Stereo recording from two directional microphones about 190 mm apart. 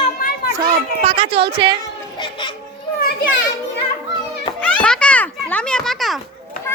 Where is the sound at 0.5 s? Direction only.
25° right (ahead or behind).